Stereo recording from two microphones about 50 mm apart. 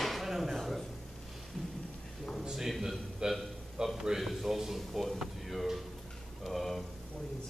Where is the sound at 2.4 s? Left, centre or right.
Centre.